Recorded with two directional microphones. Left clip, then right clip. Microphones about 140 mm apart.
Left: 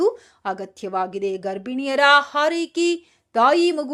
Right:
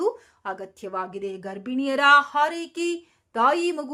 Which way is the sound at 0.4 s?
30° left (ahead or behind).